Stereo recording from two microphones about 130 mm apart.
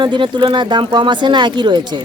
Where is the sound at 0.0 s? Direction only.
40° right (ahead or behind).